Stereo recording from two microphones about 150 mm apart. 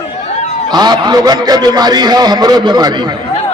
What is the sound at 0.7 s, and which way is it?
A man's voice, 30° right (ahead or behind).